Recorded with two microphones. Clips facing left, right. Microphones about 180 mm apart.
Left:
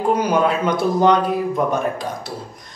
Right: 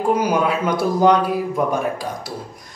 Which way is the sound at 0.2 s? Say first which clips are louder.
Left 1 dB; 10° right (ahead or behind).